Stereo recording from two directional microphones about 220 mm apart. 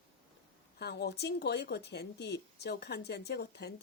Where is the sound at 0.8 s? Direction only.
50° left (ahead or behind).